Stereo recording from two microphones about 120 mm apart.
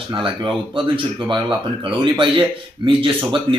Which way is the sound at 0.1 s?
45° right (ahead or behind).